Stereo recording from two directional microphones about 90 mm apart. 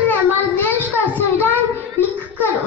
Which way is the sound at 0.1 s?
20° left (ahead or behind).